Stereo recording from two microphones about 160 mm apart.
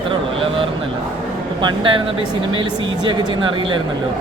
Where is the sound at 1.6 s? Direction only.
30° right (ahead or behind).